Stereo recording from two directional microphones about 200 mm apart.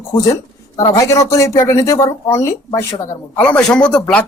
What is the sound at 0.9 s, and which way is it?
Speech, 15° left (ahead or behind).